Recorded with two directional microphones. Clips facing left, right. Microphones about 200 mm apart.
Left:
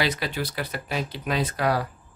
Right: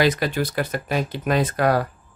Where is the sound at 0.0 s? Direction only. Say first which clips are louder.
Right 6 dB; 45° right (ahead or behind).